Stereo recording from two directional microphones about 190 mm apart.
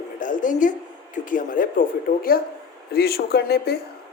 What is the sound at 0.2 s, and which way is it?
A woman's voice, 45° left (ahead or behind).